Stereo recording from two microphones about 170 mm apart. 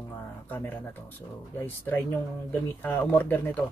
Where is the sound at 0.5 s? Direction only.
10° left (ahead or behind).